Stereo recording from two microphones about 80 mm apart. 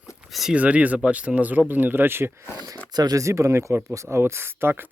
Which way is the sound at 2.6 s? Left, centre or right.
Right.